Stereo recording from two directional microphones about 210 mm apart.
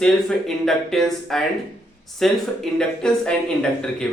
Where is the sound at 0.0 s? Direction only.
Centre (ahead or behind).